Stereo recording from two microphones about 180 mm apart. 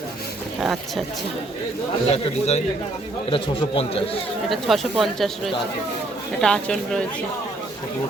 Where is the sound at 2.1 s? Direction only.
35° left (ahead or behind).